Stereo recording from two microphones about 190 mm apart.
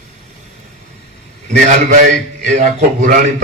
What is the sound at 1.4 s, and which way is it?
A man's voice, 45° right (ahead or behind).